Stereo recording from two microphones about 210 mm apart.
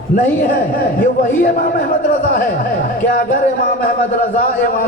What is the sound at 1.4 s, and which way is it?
A man's voice, 45° left (ahead or behind).